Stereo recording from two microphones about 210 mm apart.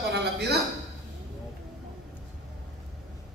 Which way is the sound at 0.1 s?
50° right (ahead or behind).